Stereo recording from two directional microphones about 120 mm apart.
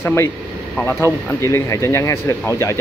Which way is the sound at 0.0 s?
20° left (ahead or behind).